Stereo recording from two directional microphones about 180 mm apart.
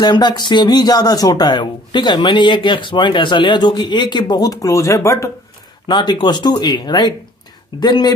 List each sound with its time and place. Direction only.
0.0 s speech: 25° left (ahead or behind)